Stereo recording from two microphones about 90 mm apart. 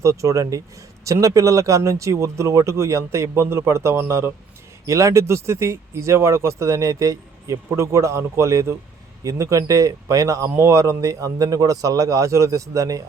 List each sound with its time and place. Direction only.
0.0 s speech: 35° right (ahead or behind)